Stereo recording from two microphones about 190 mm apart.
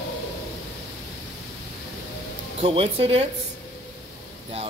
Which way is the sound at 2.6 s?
30° right (ahead or behind).